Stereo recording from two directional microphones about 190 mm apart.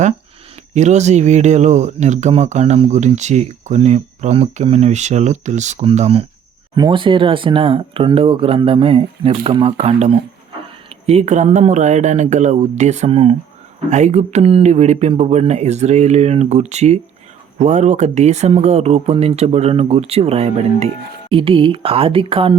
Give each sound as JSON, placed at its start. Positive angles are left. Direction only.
{"t": 0.7, "sound": "speech", "side_deg": -35}